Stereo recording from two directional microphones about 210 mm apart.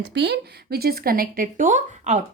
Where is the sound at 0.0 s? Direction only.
55° right (ahead or behind).